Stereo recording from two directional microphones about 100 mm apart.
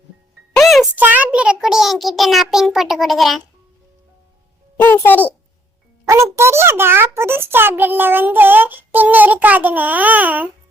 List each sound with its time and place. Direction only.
0.6 s music: centre (ahead or behind)
0.9 s a child's voice: 15° right (ahead or behind); by 3.4 s centre (ahead or behind)
4.8 s a child's voice: 20° left (ahead or behind)
6.1 s speech: 30° right (ahead or behind)